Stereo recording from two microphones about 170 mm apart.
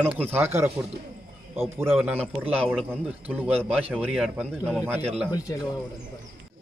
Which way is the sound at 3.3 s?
10° right (ahead or behind).